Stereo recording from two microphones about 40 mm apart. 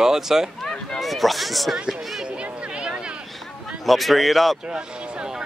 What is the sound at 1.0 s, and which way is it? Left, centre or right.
Speech, centre.